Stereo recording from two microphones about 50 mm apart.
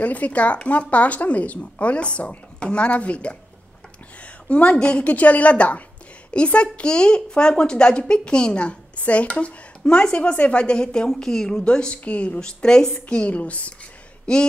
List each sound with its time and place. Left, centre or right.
0.0 s a woman's voice: left
12.4 s speech: centre
13.1 s a woman's voice: left